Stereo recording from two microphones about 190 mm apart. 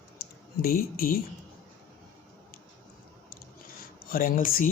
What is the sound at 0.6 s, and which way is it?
Speech, 50° left (ahead or behind).